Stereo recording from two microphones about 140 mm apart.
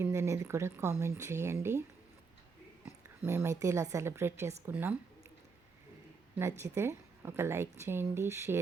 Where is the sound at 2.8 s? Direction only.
20° right (ahead or behind).